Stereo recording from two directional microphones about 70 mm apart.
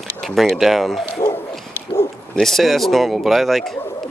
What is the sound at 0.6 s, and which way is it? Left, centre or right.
Speech, centre.